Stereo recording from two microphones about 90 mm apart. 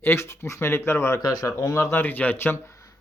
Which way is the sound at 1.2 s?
45° left (ahead or behind).